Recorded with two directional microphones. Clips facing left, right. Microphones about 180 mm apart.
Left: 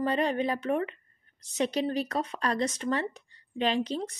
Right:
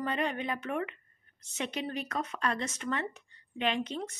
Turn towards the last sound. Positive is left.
turn(degrees=35)  # may be behind; listen again after turning